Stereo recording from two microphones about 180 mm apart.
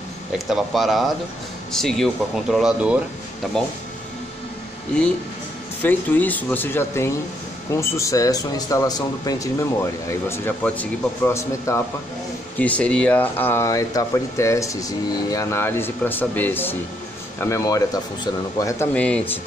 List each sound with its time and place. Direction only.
0.5 s speech: centre (ahead or behind)
5.8 s speech: 10° left (ahead or behind)